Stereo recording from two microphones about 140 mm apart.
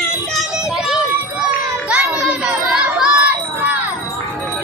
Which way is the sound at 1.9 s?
5° right (ahead or behind).